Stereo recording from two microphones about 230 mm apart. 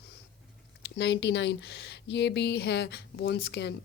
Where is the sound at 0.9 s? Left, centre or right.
Left.